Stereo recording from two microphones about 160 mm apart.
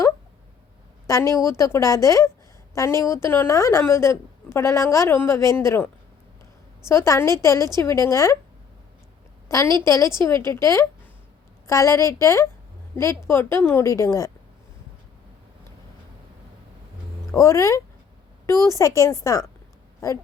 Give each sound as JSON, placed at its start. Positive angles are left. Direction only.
{"t": 1.0, "sound": "a woman's voice", "side_deg": 20}
{"t": 9.5, "sound": "a woman's voice", "side_deg": 20}
{"t": 17.3, "sound": "a woman's voice", "side_deg": 20}